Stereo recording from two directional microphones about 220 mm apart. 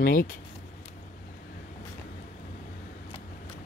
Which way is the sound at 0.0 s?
40° left (ahead or behind).